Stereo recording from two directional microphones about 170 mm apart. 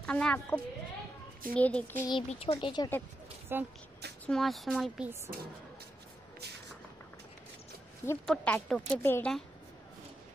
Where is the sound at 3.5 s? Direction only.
15° right (ahead or behind).